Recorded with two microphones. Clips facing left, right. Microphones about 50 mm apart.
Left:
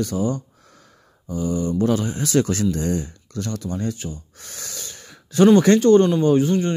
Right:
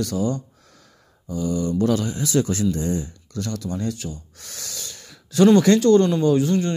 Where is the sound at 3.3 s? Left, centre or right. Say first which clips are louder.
Left 1 dB; left.